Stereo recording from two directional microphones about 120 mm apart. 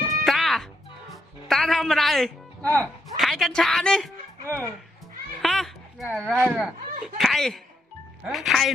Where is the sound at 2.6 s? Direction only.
15° left (ahead or behind).